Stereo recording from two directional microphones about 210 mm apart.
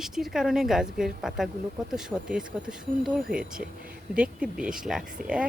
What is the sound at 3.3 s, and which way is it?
Speech, 40° right (ahead or behind).